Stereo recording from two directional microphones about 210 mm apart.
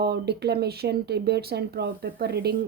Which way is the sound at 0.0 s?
50° right (ahead or behind).